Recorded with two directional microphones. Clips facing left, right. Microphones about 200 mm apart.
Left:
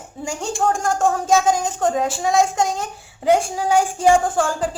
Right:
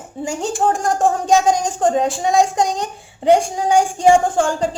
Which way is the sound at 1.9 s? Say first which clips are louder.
Right 3 dB; centre (ahead or behind).